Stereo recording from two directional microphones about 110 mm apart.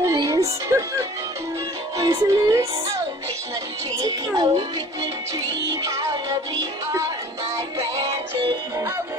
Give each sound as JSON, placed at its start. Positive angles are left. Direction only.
{"t": 0.0, "sound": "music", "side_deg": -35}
{"t": 2.0, "sound": "music", "side_deg": -30}
{"t": 4.0, "sound": "speech", "side_deg": -35}
{"t": 8.1, "sound": "music", "side_deg": -50}